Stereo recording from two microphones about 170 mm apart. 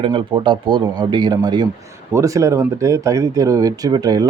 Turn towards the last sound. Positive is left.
turn(degrees=-20)  # may be behind; listen again after turning